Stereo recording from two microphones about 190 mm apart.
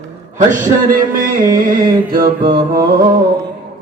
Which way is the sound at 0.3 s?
45° right (ahead or behind).